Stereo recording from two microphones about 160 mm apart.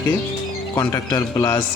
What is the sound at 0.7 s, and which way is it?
Speech, 20° left (ahead or behind).